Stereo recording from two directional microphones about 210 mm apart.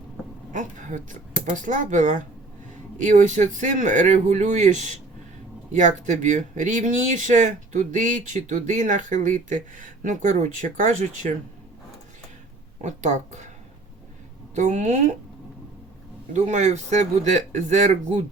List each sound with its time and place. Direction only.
0.5 s speech: 35° right (ahead or behind)
12.8 s speech: 35° right (ahead or behind)
14.5 s speech: 35° right (ahead or behind)
16.3 s speech: 35° right (ahead or behind)